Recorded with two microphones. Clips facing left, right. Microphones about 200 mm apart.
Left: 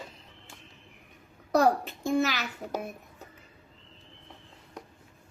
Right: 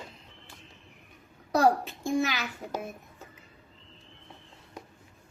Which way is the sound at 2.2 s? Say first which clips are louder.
Left 1 dB; 40° left (ahead or behind).